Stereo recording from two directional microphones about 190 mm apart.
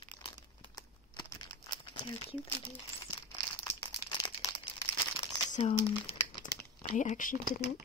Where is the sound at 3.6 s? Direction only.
20° left (ahead or behind).